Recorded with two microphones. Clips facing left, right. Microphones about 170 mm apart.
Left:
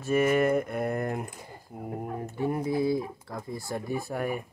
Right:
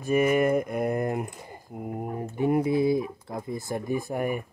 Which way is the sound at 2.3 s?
20° right (ahead or behind).